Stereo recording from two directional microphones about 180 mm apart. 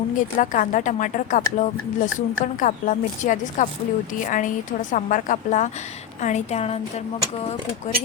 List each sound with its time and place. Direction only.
0.2 s a woman's voice: 45° left (ahead or behind)